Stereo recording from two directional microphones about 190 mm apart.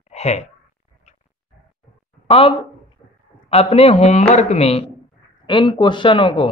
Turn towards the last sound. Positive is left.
turn(degrees=25)  # may be behind; listen again after turning